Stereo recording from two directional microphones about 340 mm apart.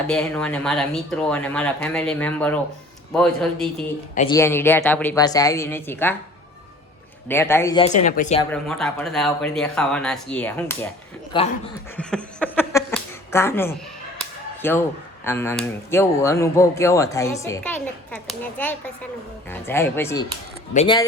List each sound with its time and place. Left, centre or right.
0.1 s speech: centre
4.1 s speech: centre
4.4 s speech: centre
7.3 s speech: centre
7.9 s speech: left
8.5 s speech: centre
11.9 s a sound: centre
15.2 s speech: centre